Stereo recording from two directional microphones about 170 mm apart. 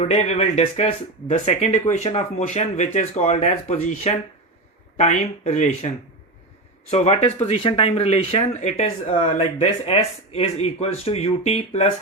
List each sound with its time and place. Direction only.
0.0 s speech: 40° left (ahead or behind)
6.9 s speech: 40° left (ahead or behind)